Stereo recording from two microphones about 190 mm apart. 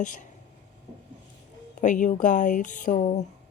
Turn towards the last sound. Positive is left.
turn(degrees=40)  # may be behind; listen again after turning